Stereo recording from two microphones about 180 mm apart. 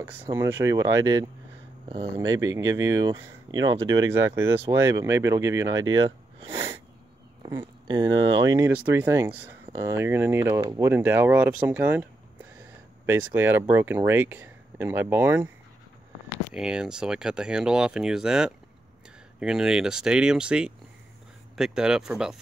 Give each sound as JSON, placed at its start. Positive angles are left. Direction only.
{"t": 0.3, "sound": "speech", "side_deg": -15}
{"t": 7.4, "sound": "speech", "side_deg": -20}
{"t": 16.5, "sound": "speech", "side_deg": -5}